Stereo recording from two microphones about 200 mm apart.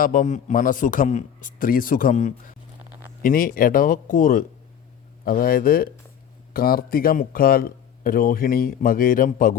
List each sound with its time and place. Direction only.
0.0 s a man's voice: 40° left (ahead or behind)